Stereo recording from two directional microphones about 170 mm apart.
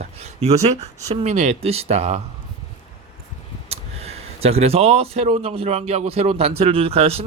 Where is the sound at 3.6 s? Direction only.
35° right (ahead or behind).